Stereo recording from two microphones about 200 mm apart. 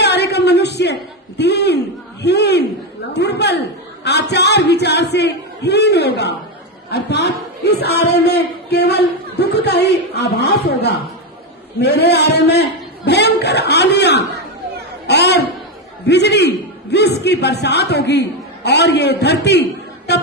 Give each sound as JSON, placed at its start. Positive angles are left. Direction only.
{"t": 0.0, "sound": "a sound", "side_deg": 55}
{"t": 4.0, "sound": "singing", "side_deg": 55}
{"t": 6.9, "sound": "a sound", "side_deg": 55}
{"t": 11.8, "sound": "a man's voice", "side_deg": 55}
{"t": 15.0, "sound": "chatter", "side_deg": 55}
{"t": 16.0, "sound": "a man's voice", "side_deg": 60}